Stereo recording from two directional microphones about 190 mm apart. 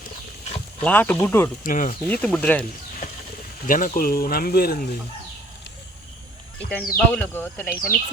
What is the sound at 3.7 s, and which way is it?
Speech, 45° left (ahead or behind).